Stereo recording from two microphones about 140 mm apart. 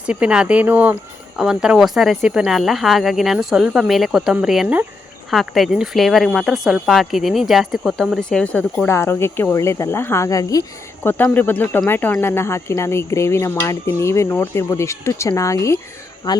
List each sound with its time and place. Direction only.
0.0 s speech: 5° right (ahead or behind)
8.9 s speech: 15° left (ahead or behind)
11.0 s speech: 15° left (ahead or behind); by 16.4 s 30° left (ahead or behind)